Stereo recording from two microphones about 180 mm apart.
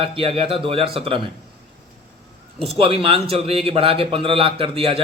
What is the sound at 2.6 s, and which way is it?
A man's voice, 30° right (ahead or behind).